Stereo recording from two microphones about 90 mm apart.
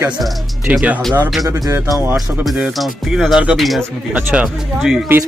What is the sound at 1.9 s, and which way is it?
Speech, 30° right (ahead or behind).